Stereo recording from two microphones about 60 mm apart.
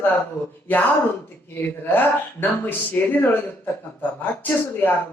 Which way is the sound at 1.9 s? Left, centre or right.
Left.